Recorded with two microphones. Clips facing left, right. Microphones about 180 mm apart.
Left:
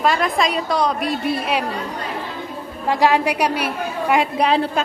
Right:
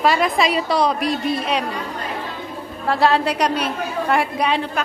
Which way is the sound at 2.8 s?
15° left (ahead or behind).